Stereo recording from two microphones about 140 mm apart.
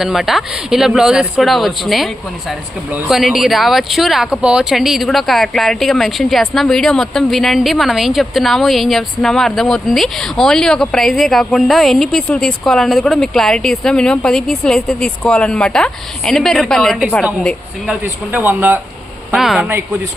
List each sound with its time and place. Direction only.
0.0 s speech: centre (ahead or behind)
18.0 s speech: 15° right (ahead or behind)
19.3 s speech: centre (ahead or behind)
19.6 s speech: 20° right (ahead or behind)